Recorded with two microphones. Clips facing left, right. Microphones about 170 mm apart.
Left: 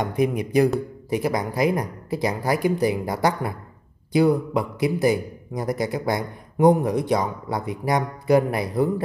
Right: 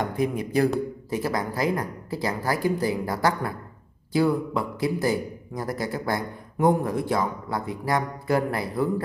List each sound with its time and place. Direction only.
0.0 s a man's voice: 20° left (ahead or behind)